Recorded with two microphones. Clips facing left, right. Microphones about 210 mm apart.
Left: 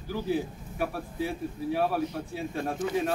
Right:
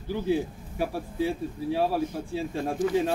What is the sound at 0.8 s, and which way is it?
A man's voice, 30° right (ahead or behind).